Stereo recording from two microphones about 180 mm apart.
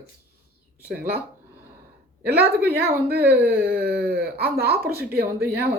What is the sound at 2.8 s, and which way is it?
Speech, 60° right (ahead or behind).